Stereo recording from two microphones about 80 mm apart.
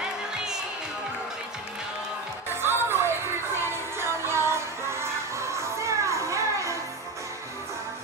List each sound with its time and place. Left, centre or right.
2.6 s music: right